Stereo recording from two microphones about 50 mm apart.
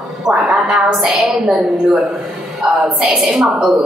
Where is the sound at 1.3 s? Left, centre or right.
Centre.